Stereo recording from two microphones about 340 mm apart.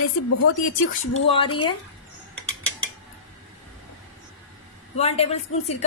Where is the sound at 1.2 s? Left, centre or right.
Centre.